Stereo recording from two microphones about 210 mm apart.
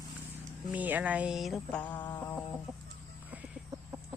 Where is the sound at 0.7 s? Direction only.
5° right (ahead or behind).